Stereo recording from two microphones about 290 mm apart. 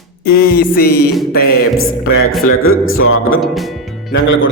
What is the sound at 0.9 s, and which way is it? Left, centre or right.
Music, left.